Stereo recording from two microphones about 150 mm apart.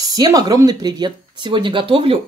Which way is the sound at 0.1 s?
25° right (ahead or behind).